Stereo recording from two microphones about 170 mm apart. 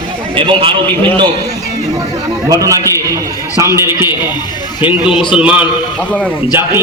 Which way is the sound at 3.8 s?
15° right (ahead or behind).